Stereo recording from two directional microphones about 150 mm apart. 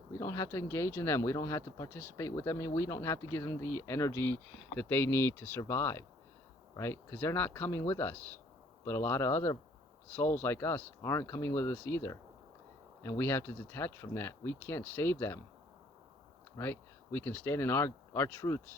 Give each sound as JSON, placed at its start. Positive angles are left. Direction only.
{"t": 0.1, "sound": "speech", "side_deg": 20}
{"t": 16.6, "sound": "speech", "side_deg": 15}